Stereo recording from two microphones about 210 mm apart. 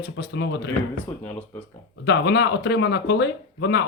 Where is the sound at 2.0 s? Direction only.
55° left (ahead or behind).